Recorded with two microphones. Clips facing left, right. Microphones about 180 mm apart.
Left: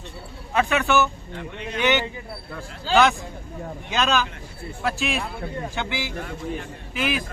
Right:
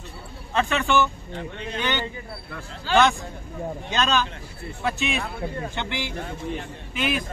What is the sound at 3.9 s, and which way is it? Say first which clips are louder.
Speech: left 1 dB; 10° left (ahead or behind).